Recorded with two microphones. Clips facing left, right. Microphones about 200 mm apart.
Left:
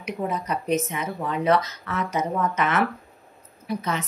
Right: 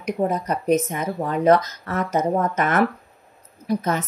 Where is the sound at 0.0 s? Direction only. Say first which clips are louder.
Right 5 dB; 45° right (ahead or behind).